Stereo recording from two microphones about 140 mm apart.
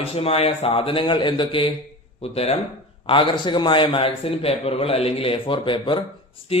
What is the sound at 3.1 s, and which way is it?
A man's voice, 35° left (ahead or behind).